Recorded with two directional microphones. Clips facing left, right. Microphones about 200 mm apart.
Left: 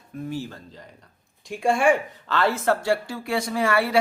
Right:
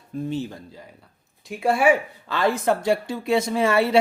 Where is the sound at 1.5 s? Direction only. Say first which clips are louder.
Right 1 dB; 5° right (ahead or behind).